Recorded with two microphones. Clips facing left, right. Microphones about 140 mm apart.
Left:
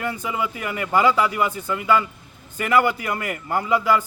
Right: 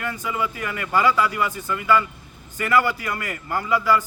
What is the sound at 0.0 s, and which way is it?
A man's voice, 20° left (ahead or behind).